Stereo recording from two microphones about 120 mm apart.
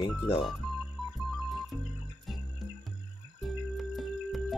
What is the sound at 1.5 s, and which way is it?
Music, centre (ahead or behind).